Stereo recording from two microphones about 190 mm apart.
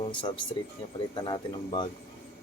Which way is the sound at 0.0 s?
25° left (ahead or behind).